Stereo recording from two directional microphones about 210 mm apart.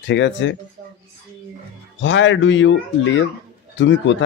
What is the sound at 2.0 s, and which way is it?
Speech, 60° left (ahead or behind).